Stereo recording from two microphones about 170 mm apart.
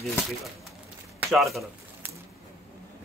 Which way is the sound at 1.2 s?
Centre (ahead or behind).